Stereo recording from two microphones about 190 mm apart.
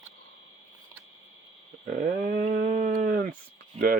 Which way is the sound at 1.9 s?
50° right (ahead or behind).